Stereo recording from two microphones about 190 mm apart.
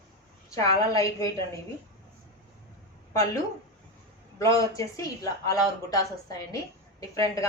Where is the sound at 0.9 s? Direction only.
20° left (ahead or behind).